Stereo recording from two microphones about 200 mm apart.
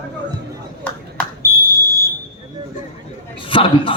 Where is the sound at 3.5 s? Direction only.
25° left (ahead or behind).